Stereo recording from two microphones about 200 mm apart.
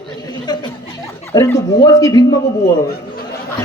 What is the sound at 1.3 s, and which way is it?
A man's voice, 15° left (ahead or behind).